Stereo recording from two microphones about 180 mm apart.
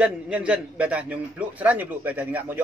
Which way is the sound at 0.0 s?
5° right (ahead or behind).